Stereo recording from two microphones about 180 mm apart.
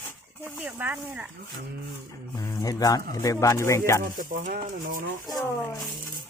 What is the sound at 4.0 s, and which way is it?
Speech, 50° right (ahead or behind).